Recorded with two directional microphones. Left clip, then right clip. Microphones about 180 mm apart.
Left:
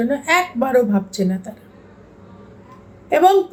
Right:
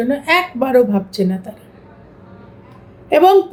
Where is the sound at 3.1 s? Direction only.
20° right (ahead or behind).